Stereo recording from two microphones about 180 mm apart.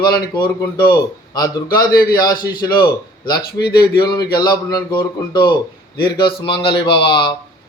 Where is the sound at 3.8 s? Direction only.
25° left (ahead or behind).